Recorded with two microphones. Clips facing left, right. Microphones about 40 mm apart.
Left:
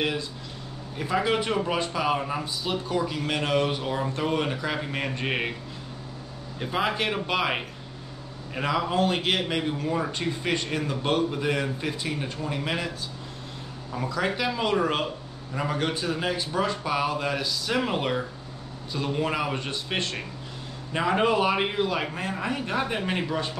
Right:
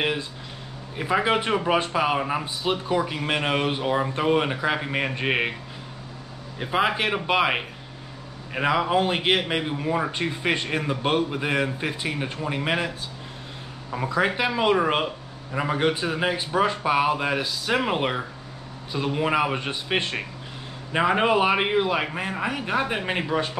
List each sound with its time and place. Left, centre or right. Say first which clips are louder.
0.9 s speech: right 3 dB; right
6.6 s speech: right 3 dB; centre
13.9 s speech: right 4 dB; right